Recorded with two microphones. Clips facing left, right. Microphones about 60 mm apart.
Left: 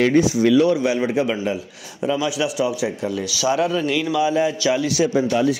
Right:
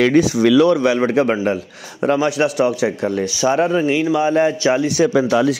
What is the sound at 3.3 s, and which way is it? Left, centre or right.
Speech, right.